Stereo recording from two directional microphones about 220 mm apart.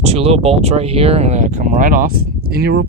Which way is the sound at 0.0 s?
25° right (ahead or behind).